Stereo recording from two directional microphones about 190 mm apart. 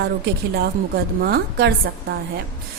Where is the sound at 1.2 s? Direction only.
60° right (ahead or behind).